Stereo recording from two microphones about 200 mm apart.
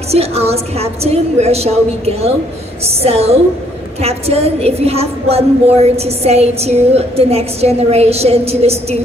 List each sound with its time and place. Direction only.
0.1 s a woman's voice: 30° right (ahead or behind)